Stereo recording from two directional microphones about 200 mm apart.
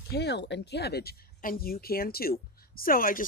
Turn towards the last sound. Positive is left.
turn(degrees=45)  # may be behind; listen again after turning